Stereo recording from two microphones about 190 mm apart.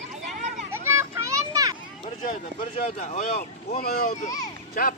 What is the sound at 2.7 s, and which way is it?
Speech, 35° left (ahead or behind).